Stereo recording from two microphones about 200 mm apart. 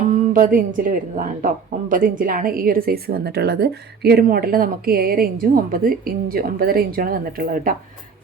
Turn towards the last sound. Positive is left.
turn(degrees=-45)  # may be behind; listen again after turning